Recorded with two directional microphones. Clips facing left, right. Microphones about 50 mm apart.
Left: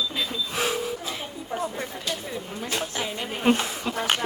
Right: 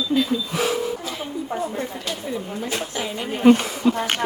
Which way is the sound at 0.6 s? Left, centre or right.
Left.